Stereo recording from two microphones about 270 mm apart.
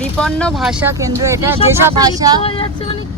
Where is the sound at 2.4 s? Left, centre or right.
Centre.